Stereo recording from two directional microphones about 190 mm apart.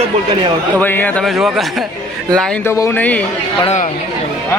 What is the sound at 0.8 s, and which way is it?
A man's voice, 10° left (ahead or behind).